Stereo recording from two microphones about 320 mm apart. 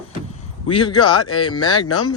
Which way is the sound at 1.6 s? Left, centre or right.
Centre.